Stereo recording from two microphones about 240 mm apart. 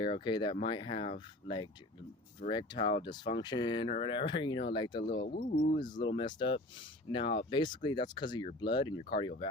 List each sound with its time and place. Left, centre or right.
0.0 s speech: centre
5.2 s speech: left
5.8 s speech: centre